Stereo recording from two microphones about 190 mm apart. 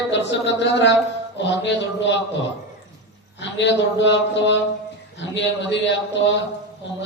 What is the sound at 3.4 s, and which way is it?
Mantra, 70° left (ahead or behind).